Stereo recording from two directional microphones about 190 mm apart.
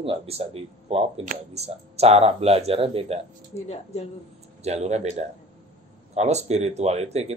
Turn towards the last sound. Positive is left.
turn(degrees=-35)  # may be behind; listen again after turning